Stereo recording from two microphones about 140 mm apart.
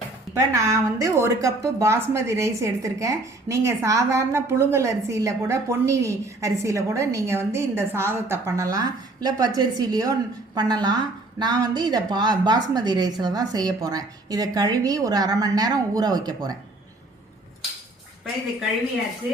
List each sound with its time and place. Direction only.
0.3 s a woman's voice: 25° right (ahead or behind)